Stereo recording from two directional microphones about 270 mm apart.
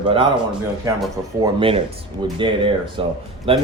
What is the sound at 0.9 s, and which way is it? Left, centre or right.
Speech, centre.